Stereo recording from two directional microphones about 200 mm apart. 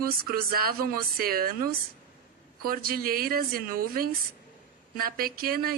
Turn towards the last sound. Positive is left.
turn(degrees=-50)  # may be behind; listen again after turning